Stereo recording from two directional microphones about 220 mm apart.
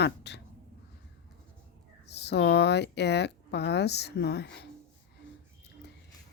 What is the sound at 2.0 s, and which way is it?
Speech, 50° left (ahead or behind).